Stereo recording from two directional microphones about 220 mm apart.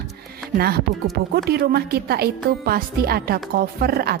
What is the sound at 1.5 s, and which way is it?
A woman's voice, 45° right (ahead or behind).